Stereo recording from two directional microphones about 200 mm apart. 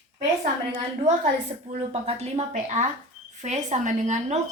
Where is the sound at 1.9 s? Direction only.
30° right (ahead or behind).